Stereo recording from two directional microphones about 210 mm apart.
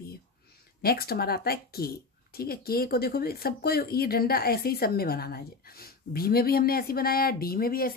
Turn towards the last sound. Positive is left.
turn(degrees=45)  # may be behind; listen again after turning